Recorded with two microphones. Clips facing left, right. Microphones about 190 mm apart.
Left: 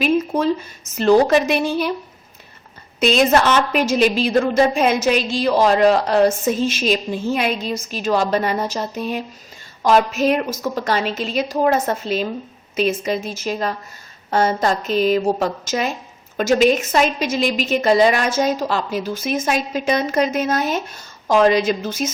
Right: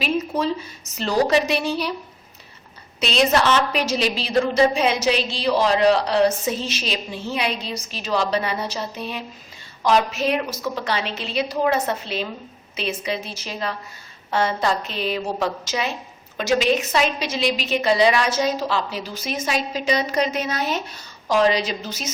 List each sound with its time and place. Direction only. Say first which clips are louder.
0.0 s a woman's voice: left 5 dB; 50° left (ahead or behind)
3.0 s a woman's voice: left 4 dB; 50° left (ahead or behind)